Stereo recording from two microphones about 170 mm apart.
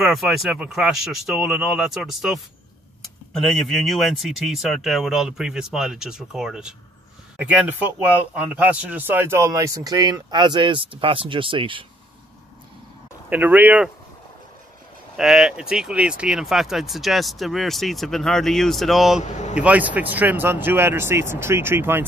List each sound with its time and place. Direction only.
0.0 s speech: centre (ahead or behind); by 11.8 s 30° right (ahead or behind)
13.3 s speech: 10° right (ahead or behind)
15.1 s speech: centre (ahead or behind)